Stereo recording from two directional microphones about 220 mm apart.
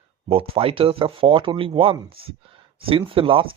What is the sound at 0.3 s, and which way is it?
Speech, 25° right (ahead or behind).